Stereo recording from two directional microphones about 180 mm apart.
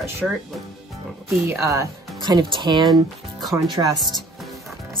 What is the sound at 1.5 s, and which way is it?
Speech, 15° right (ahead or behind).